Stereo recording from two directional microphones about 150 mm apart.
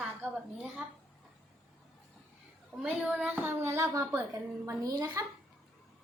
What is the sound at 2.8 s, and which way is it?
A woman's voice, 5° right (ahead or behind).